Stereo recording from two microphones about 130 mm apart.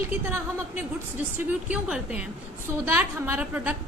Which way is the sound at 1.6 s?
10° right (ahead or behind).